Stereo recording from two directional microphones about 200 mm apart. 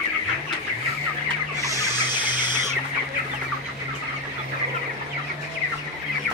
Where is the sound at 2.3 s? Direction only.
20° left (ahead or behind).